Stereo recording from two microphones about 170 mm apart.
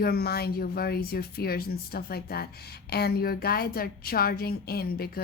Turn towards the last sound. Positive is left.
turn(degrees=65)  # may be behind; listen again after turning